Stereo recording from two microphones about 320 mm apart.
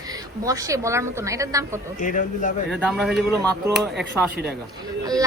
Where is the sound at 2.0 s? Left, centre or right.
Left.